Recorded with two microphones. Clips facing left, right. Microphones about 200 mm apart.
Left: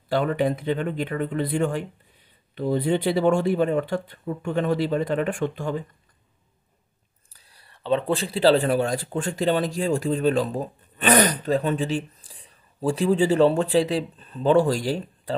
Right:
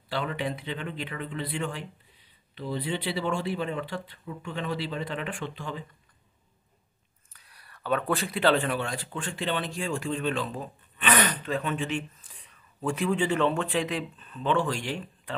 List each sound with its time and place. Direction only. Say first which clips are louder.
0.1 s speech: left 9 dB; 45° left (ahead or behind)
7.3 s speech: even; 30° left (ahead or behind)